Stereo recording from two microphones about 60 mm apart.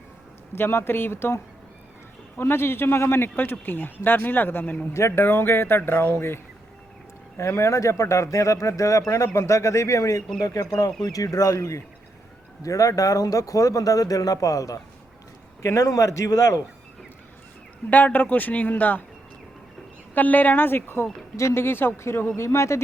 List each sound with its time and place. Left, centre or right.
0.5 s speech: left
2.4 s speech: left
3.3 s speech: left
4.9 s speech: left
7.3 s speech: left
10.4 s speech: left
17.8 s a man's voice: left
20.1 s speech: left
22.4 s speech: left